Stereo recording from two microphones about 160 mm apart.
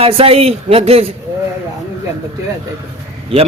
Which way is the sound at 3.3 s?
35° right (ahead or behind).